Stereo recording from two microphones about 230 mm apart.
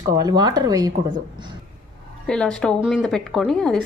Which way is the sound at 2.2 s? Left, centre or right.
Centre.